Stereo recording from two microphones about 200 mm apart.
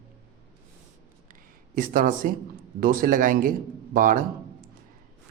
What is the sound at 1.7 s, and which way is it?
A man's voice, 45° right (ahead or behind).